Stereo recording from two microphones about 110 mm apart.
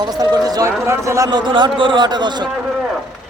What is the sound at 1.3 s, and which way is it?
Speech, 45° right (ahead or behind).